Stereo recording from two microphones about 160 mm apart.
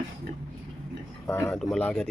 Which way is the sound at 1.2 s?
15° left (ahead or behind).